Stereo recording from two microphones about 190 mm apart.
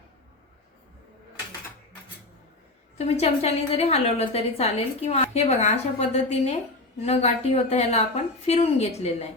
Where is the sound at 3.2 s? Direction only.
35° left (ahead or behind).